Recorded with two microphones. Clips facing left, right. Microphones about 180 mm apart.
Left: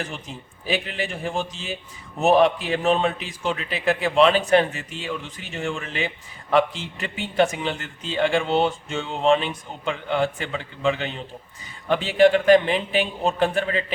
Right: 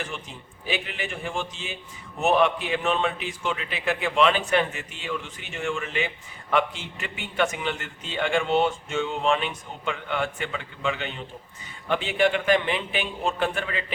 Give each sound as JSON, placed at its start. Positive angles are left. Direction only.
{"t": 0.7, "sound": "a man's voice", "side_deg": 35}